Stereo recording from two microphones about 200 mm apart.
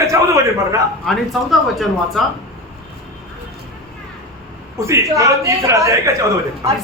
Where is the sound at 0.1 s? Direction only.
15° right (ahead or behind).